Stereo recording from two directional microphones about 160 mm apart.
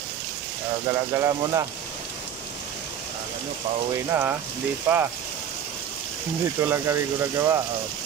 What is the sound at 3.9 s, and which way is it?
Speech, 15° right (ahead or behind).